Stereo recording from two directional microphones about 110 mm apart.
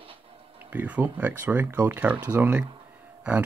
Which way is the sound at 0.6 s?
15° right (ahead or behind).